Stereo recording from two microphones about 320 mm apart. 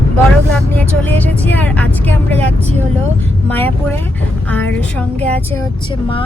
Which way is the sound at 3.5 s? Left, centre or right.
Centre.